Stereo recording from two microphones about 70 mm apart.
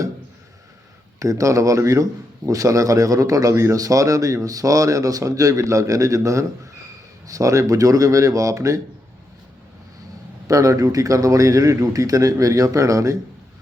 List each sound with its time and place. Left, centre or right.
1.2 s a man's voice: right
10.4 s a man's voice: right